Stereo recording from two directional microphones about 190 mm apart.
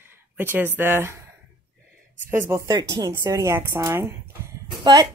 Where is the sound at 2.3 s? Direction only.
15° right (ahead or behind).